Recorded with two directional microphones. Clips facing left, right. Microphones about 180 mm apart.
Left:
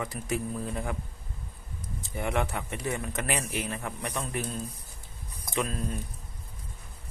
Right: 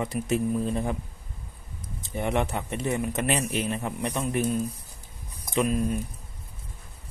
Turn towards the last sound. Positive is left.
turn(degrees=-15)  # may be behind; listen again after turning